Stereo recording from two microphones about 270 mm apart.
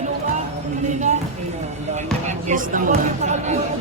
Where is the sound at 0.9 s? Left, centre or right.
Right.